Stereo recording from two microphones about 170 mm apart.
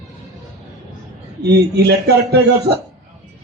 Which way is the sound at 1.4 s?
75° right (ahead or behind).